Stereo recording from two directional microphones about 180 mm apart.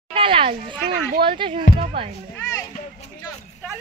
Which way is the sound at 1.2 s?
30° right (ahead or behind).